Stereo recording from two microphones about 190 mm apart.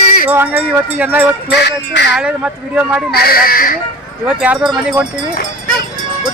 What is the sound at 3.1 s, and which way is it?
Speech, 55° left (ahead or behind).